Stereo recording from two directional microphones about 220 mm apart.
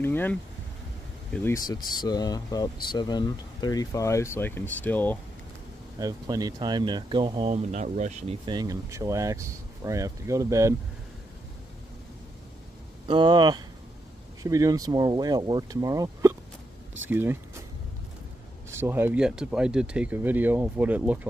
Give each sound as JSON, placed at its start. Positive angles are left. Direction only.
{"t": 0.0, "sound": "speech", "side_deg": 10}
{"t": 5.9, "sound": "speech", "side_deg": -15}
{"t": 8.5, "sound": "speech", "side_deg": -15}
{"t": 13.1, "sound": "speech", "side_deg": -20}
{"t": 18.7, "sound": "speech", "side_deg": -10}